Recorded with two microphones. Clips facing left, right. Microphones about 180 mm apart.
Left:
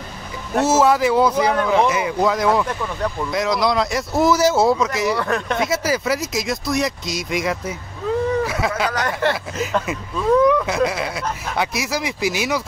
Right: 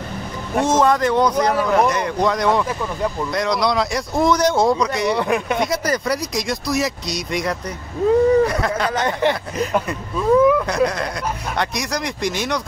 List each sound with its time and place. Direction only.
0.6 s speech: 5° left (ahead or behind)
5.1 s speech: 15° right (ahead or behind)
5.6 s speech: 5° left (ahead or behind)
8.9 s a sound: 20° right (ahead or behind)
9.8 s speech: 5° right (ahead or behind)